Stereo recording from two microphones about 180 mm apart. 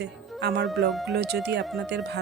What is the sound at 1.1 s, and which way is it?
Speech, 65° right (ahead or behind).